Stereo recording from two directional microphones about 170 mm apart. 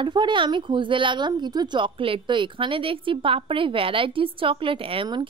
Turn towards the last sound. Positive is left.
turn(degrees=-30)  # may be behind; listen again after turning